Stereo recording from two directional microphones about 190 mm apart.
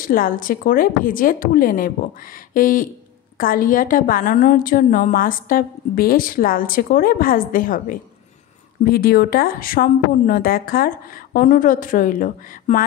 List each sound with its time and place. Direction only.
0.0 s a woman's voice: 50° left (ahead or behind)